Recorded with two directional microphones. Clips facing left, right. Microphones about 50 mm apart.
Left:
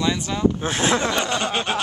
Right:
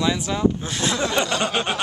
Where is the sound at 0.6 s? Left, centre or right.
Left.